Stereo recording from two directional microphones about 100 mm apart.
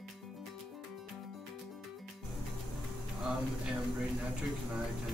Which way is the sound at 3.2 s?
Centre (ahead or behind).